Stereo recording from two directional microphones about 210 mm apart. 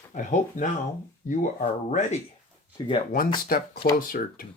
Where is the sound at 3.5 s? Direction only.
45° left (ahead or behind).